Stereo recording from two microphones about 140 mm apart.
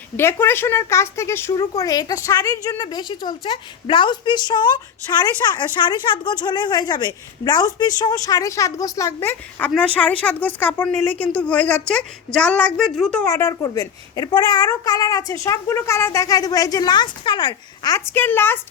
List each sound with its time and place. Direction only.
0.2 s speech: 15° left (ahead or behind)
13.2 s speech: 20° left (ahead or behind)
17.9 s a woman's voice: 15° left (ahead or behind)